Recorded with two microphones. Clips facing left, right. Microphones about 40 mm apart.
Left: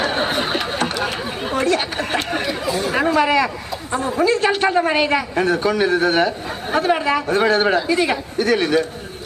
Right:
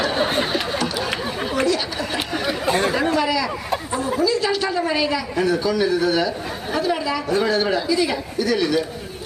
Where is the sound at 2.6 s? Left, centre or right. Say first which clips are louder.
Right 6 dB; right.